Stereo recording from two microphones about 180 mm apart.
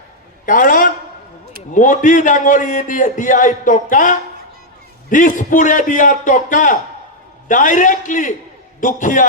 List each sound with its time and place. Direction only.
0.4 s a man's voice: 50° left (ahead or behind)